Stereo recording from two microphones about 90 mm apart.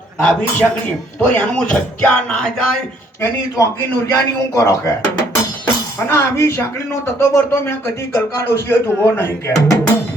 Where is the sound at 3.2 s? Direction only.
30° left (ahead or behind).